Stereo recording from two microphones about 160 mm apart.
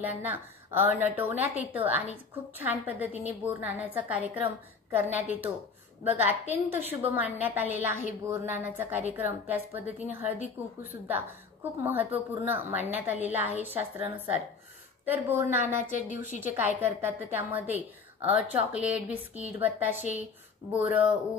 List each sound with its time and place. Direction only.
0.0 s a woman's voice: 10° right (ahead or behind)